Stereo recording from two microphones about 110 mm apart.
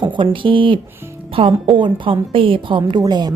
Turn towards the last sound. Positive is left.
turn(degrees=-40)  # may be behind; listen again after turning